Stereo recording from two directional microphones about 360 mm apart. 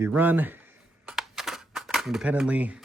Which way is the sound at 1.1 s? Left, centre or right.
Centre.